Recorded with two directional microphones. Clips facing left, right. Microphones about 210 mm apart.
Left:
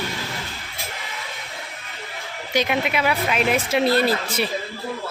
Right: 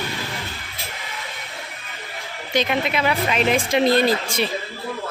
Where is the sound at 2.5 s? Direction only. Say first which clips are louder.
Even; 10° left (ahead or behind).